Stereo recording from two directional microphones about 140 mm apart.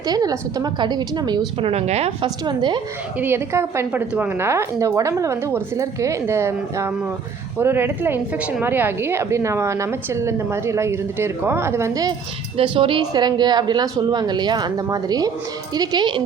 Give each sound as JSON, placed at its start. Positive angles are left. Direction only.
{"t": 0.0, "sound": "a woman's voice", "side_deg": -30}
{"t": 1.6, "sound": "speech", "side_deg": -50}
{"t": 2.2, "sound": "a woman's voice", "side_deg": -30}
{"t": 3.2, "sound": "a woman's voice", "side_deg": -15}
{"t": 12.5, "sound": "a woman's voice", "side_deg": -35}